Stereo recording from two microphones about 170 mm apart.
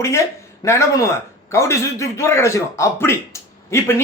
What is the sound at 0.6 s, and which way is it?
A man's voice, 15° left (ahead or behind).